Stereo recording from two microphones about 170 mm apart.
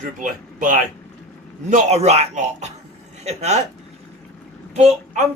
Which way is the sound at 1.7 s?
40° right (ahead or behind).